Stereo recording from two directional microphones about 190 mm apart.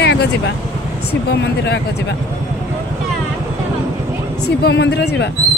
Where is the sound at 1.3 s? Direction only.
65° left (ahead or behind).